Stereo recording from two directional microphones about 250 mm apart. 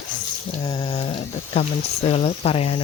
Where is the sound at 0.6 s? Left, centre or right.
Centre.